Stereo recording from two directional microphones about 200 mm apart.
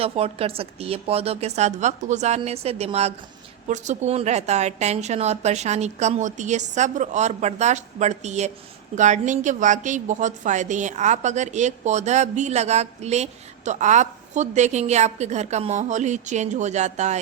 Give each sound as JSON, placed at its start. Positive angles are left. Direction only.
{"t": 0.0, "sound": "a woman's voice", "side_deg": -30}